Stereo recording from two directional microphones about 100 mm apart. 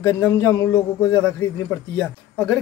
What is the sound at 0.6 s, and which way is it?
A man's voice, 15° left (ahead or behind).